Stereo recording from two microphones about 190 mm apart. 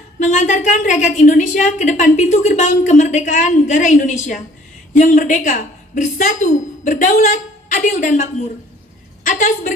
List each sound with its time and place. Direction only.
0.2 s a woman's voice: 40° left (ahead or behind)